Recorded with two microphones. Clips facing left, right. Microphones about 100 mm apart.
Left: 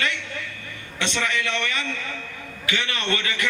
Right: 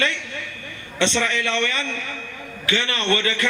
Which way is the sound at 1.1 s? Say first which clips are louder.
Right 3 dB; 40° right (ahead or behind).